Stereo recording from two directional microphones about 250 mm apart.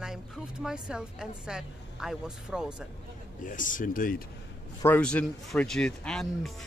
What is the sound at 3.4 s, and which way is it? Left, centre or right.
Speech, left.